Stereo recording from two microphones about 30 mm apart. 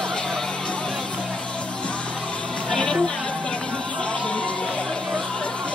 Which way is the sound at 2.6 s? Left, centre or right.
Left.